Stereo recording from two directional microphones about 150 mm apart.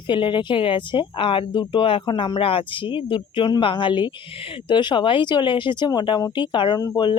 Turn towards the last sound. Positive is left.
turn(degrees=30)  # may be behind; listen again after turning